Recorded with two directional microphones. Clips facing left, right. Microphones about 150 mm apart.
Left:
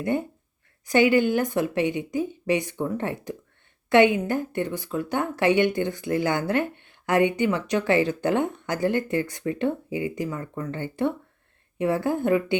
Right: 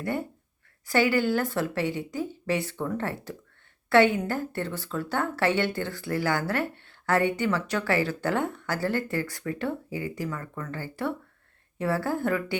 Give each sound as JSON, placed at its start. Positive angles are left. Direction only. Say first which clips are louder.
{"t": 0.0, "sound": "a woman's voice", "louder": "left 4 dB", "side_deg": 20}